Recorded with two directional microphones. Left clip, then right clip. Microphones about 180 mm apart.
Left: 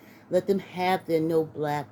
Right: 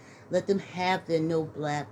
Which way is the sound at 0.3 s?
50° left (ahead or behind).